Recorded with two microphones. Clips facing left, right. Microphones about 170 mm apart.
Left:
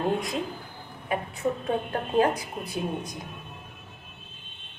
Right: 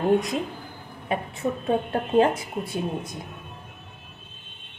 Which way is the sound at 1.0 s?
25° right (ahead or behind).